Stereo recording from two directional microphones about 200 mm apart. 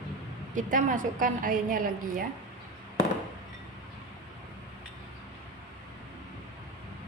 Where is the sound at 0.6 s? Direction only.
40° right (ahead or behind).